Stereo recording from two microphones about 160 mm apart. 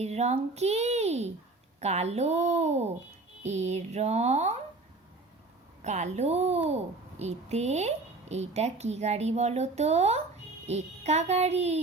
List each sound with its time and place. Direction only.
0.0 s a woman's voice: 45° right (ahead or behind)
5.8 s a woman's voice: 45° right (ahead or behind)